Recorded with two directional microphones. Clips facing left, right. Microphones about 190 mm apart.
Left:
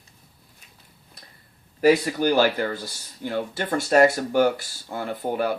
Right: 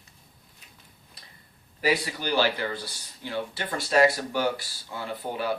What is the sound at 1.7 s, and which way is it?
Speech, 45° left (ahead or behind).